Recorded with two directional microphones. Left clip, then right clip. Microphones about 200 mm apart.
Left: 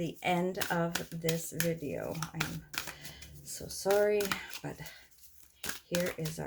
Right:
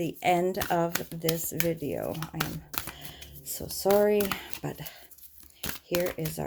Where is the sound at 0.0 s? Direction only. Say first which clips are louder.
Right 7 dB; 40° right (ahead or behind).